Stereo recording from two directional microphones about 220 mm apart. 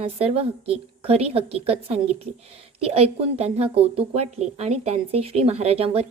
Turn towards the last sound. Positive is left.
turn(degrees=-25)  # may be behind; listen again after turning